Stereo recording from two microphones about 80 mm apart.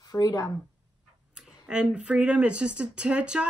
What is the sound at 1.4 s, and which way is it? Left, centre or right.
Speech, centre.